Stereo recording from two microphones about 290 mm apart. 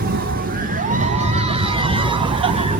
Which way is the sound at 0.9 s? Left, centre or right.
Right.